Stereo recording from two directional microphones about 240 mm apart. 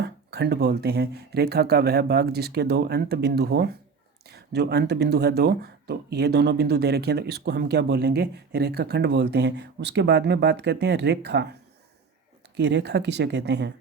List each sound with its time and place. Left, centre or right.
0.0 s speech: right
12.5 s speech: right